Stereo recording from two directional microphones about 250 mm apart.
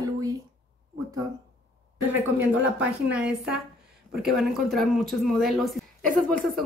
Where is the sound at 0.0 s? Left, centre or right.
Centre.